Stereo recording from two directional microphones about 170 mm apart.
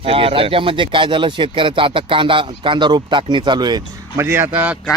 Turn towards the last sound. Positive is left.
turn(degrees=-10)  # may be behind; listen again after turning